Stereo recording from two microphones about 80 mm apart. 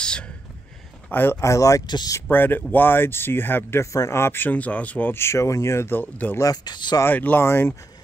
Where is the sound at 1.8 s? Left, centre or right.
Left.